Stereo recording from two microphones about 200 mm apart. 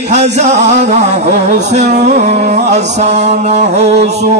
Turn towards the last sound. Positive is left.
turn(degrees=-30)  # may be behind; listen again after turning